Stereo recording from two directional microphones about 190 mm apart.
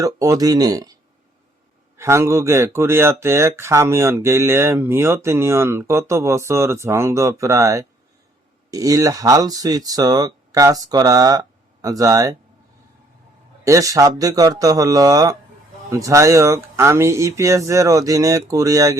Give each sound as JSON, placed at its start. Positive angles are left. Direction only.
{"t": 0.0, "sound": "speech", "side_deg": -20}
{"t": 2.0, "sound": "speech", "side_deg": -15}
{"t": 13.7, "sound": "speech", "side_deg": -15}